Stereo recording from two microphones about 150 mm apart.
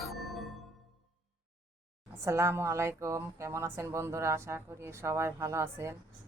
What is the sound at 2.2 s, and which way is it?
Speech, 20° right (ahead or behind).